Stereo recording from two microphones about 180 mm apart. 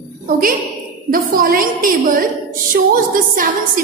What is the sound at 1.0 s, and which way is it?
A woman's voice, 50° right (ahead or behind).